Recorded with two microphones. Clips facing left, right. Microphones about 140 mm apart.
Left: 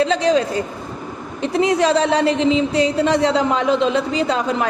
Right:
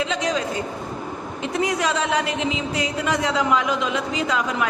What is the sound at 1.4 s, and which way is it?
A woman's voice, 30° left (ahead or behind).